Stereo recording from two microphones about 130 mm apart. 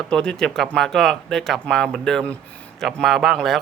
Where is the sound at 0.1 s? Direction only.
5° left (ahead or behind).